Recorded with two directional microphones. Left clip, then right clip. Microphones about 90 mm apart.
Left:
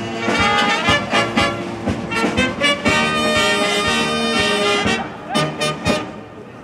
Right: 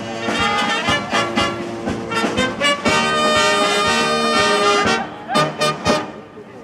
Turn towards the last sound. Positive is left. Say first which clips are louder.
# right 2 dB
turn(degrees=-40)  # may be behind; listen again after turning